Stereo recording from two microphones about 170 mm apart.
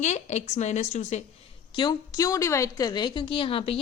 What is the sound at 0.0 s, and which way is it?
A woman's voice, 40° left (ahead or behind).